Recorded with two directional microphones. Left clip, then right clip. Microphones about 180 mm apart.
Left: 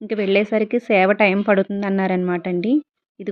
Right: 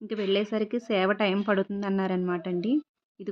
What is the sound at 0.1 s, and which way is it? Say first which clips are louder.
Speech: left 9 dB; 15° left (ahead or behind).